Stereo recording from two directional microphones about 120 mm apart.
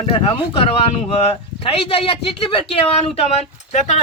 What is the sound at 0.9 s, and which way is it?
Speech, 65° left (ahead or behind).